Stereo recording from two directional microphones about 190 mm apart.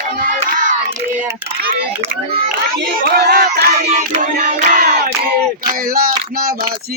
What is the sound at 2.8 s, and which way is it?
Crowd, 55° right (ahead or behind).